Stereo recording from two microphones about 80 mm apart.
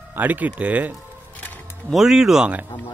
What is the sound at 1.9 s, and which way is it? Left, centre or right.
Speech, centre.